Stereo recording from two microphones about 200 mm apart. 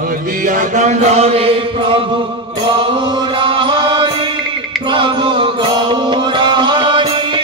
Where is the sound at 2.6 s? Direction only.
25° right (ahead or behind).